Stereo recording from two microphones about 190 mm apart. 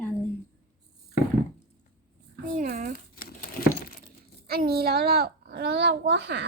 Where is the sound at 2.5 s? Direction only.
45° right (ahead or behind).